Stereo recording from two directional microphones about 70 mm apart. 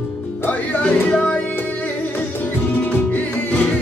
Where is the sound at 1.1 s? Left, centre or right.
Centre.